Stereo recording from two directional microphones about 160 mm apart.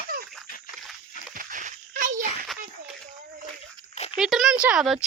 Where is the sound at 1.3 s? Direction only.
55° right (ahead or behind).